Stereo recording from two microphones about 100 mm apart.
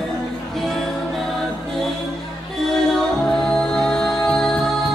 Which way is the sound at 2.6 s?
5° left (ahead or behind).